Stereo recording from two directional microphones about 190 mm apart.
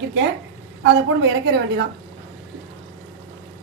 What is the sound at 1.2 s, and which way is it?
Speech, 60° right (ahead or behind).